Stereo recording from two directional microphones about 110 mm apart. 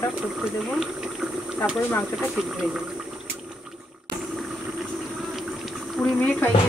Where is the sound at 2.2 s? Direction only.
5° right (ahead or behind).